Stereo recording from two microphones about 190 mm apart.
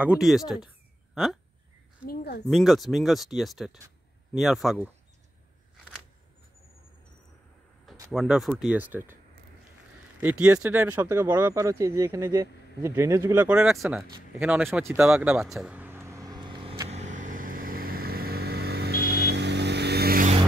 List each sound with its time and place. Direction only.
0.0 s speech: 5° right (ahead or behind)
2.0 s speech: 55° left (ahead or behind)
2.5 s speech: centre (ahead or behind)
8.1 s speech: centre (ahead or behind)
10.2 s speech: 5° right (ahead or behind)
15.0 s vehicle: 5° right (ahead or behind)
16.9 s vehicle: 40° right (ahead or behind)